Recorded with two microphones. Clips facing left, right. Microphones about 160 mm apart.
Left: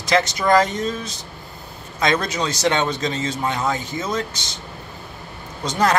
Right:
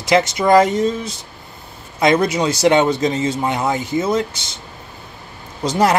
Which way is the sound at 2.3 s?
30° right (ahead or behind).